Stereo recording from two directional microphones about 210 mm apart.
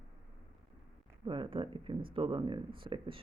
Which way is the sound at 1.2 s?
25° right (ahead or behind).